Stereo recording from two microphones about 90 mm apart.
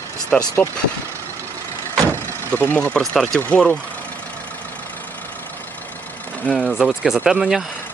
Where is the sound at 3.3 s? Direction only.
15° left (ahead or behind).